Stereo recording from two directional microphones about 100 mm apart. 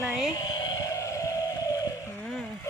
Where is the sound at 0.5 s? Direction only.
35° left (ahead or behind).